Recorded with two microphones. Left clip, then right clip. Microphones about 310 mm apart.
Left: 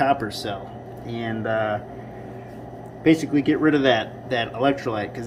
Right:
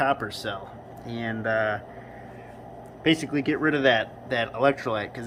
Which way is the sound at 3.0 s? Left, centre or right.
Centre.